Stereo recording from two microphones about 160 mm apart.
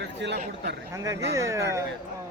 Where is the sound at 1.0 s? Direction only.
20° right (ahead or behind).